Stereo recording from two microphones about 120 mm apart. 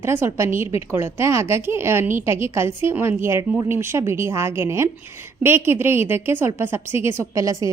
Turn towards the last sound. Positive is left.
turn(degrees=-30)  # may be behind; listen again after turning